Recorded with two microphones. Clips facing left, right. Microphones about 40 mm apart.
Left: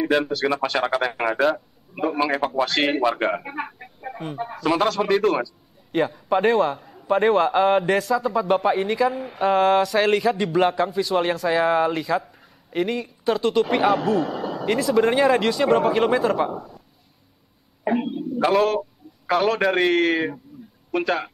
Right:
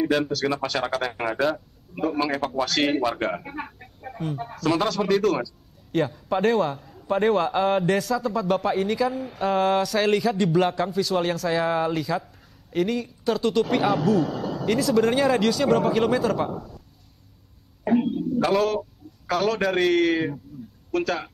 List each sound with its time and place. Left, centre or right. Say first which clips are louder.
0.0 s speech: left 2 dB; centre
17.8 s a sound: right 1 dB; centre
18.5 s a man's voice: left 3 dB; centre
20.9 s speech: left 2 dB; centre